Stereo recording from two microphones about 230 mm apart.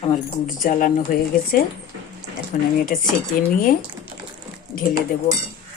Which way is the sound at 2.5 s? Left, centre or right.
Left.